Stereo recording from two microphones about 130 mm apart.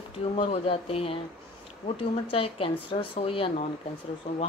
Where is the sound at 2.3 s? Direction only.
45° left (ahead or behind).